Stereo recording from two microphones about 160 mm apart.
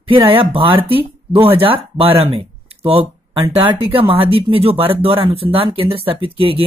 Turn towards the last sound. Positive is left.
turn(degrees=-35)  # may be behind; listen again after turning